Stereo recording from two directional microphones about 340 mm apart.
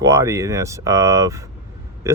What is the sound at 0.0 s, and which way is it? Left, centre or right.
Speech, centre.